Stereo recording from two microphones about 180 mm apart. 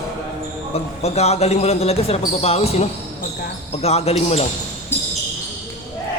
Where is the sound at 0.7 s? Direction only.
35° left (ahead or behind).